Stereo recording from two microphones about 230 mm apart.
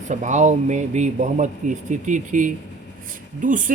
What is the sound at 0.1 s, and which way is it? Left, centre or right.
Speech, right.